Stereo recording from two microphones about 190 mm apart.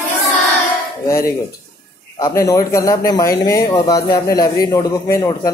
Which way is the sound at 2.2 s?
15° left (ahead or behind).